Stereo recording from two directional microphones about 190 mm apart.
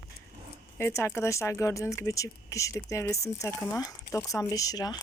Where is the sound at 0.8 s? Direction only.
15° left (ahead or behind).